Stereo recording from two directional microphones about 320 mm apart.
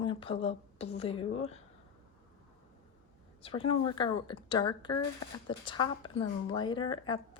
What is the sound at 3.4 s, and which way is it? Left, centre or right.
Speech, centre.